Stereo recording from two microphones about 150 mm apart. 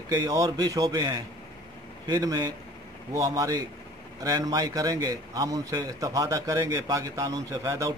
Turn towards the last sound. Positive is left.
turn(degrees=-20)  # may be behind; listen again after turning